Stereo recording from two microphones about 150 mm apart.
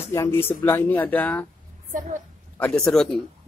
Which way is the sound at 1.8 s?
60° right (ahead or behind).